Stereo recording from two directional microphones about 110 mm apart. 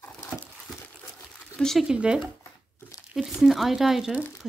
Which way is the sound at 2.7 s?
25° left (ahead or behind).